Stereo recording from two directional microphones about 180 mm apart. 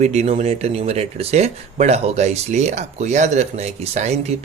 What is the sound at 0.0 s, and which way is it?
Speech, 40° right (ahead or behind).